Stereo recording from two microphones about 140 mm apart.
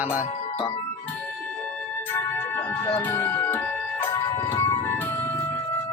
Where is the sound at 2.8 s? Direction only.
15° left (ahead or behind).